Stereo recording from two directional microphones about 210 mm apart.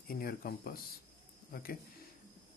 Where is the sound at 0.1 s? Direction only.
45° left (ahead or behind).